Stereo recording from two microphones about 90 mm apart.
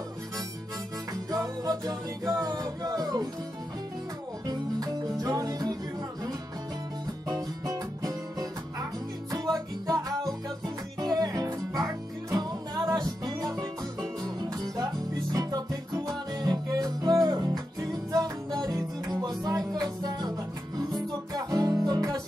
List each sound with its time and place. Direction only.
1.3 s music: 45° right (ahead or behind)
4.5 s music: 45° right (ahead or behind)
7.2 s music: 40° right (ahead or behind)
9.8 s music: 45° right (ahead or behind)
15.3 s music: 45° right (ahead or behind)